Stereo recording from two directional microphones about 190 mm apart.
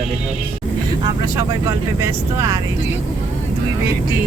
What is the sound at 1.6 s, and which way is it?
Speech, 15° right (ahead or behind).